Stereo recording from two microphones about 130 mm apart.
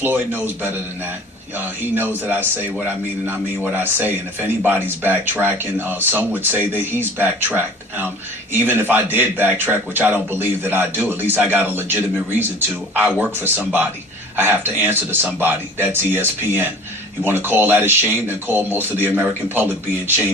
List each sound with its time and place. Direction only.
0.0 s a man's voice: 15° right (ahead or behind)